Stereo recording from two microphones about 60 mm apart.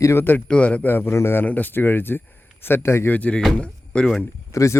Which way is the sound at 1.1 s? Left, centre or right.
Left.